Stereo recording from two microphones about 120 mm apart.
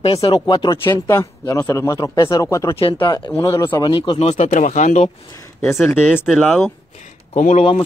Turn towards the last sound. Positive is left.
turn(degrees=70)  # may be behind; listen again after turning